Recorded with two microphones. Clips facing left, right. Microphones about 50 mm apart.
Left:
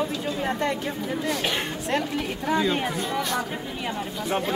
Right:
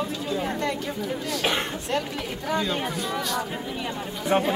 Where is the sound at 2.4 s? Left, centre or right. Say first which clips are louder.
Left 2 dB; centre.